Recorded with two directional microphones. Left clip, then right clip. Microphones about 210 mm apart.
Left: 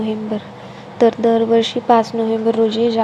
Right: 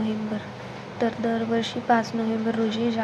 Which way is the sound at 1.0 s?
30° left (ahead or behind).